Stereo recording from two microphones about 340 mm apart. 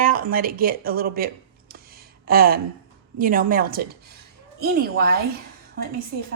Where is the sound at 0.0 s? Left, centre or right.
Right.